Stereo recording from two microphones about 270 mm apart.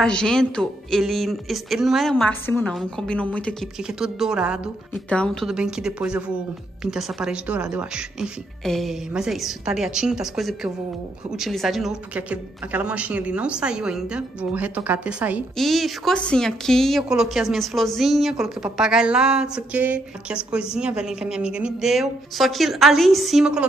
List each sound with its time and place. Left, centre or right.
0.0 s speech: centre